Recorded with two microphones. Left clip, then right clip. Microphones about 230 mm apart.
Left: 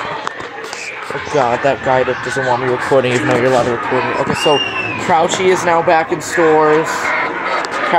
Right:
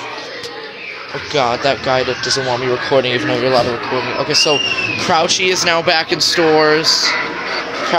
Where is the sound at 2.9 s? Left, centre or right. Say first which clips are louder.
Left 2 dB; centre.